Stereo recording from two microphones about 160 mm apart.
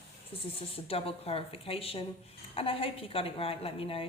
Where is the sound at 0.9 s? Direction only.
35° left (ahead or behind).